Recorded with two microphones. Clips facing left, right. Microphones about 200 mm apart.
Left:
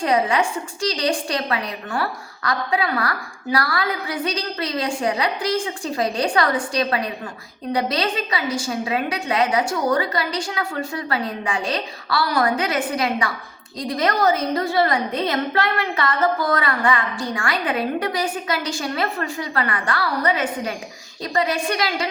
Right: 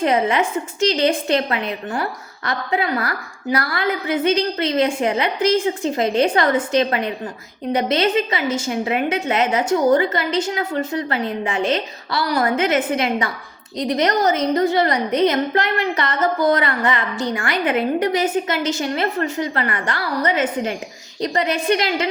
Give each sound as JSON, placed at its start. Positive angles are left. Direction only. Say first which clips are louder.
{"t": 0.0, "sound": "a woman's voice", "louder": "right 2 dB", "side_deg": -20}